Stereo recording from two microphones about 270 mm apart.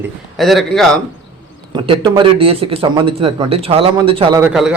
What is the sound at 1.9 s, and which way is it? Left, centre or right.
Speech, centre.